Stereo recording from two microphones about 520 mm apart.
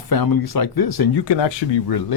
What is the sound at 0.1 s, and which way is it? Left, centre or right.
Speech, left.